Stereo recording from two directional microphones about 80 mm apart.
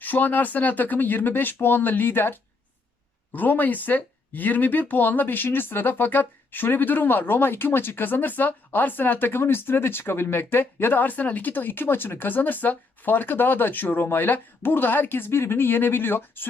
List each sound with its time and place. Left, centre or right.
0.0 s speech: left